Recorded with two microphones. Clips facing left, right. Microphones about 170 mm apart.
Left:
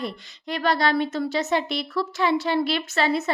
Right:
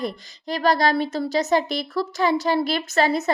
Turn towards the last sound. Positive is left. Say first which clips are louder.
# right 3 dB
turn(degrees=-40)  # may be behind; listen again after turning